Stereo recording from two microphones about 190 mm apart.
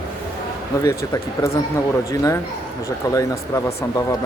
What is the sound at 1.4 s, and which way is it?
Speech, 15° left (ahead or behind).